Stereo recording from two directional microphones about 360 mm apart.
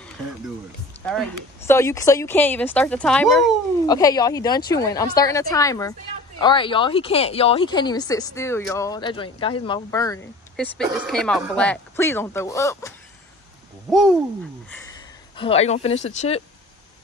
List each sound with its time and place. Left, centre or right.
1.0 s speech: centre
15.3 s speech: centre